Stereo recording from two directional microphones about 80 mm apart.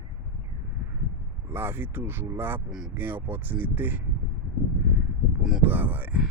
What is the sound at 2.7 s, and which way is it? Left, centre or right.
Speech, centre.